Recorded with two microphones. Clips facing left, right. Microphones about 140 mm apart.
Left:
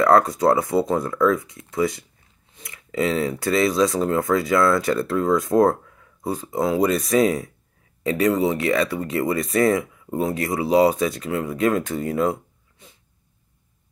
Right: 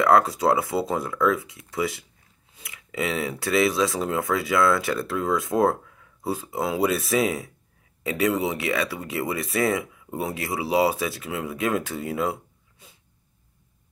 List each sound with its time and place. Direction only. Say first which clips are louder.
0.0 s speech: left 3 dB; 5° right (ahead or behind)